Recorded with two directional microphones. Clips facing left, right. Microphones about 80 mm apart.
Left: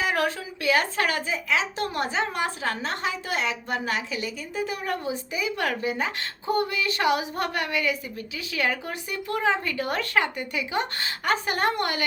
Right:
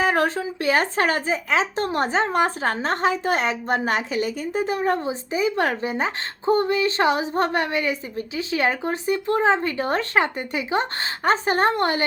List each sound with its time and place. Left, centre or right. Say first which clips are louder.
0.0 s a woman's voice: right 5 dB; right